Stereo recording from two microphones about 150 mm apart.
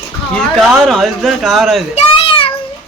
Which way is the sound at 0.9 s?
Centre (ahead or behind).